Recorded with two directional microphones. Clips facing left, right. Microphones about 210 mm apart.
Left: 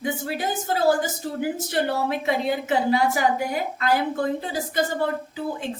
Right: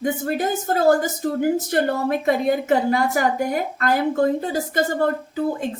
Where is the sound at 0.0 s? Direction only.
45° right (ahead or behind).